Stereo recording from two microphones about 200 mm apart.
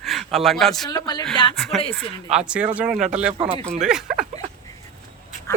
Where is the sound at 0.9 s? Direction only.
20° left (ahead or behind).